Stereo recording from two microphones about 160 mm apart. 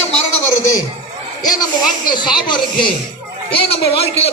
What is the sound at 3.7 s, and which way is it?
Speech, 40° left (ahead or behind).